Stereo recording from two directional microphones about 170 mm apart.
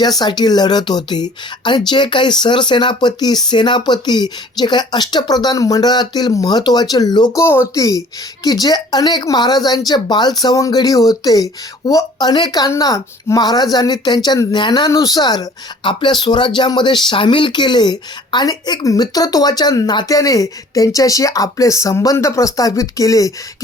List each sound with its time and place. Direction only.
0.0 s speech: 25° left (ahead or behind)